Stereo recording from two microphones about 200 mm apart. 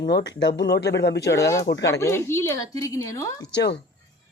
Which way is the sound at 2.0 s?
15° left (ahead or behind).